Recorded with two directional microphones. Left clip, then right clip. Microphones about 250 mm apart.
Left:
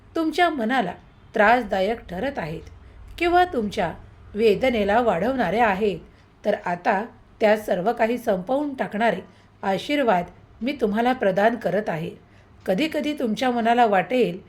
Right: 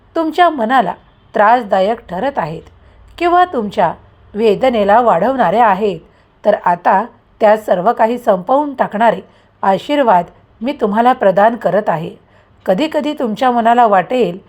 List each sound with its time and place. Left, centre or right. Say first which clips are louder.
0.1 s a woman's voice: right 9 dB; centre